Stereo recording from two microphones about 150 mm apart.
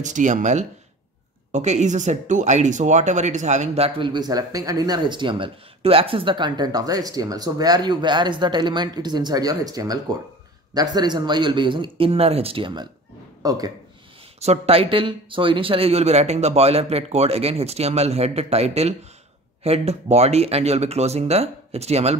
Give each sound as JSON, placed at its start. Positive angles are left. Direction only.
{"t": 0.0, "sound": "speech", "side_deg": -55}
{"t": 13.4, "sound": "speech", "side_deg": -25}
{"t": 14.4, "sound": "speech", "side_deg": -45}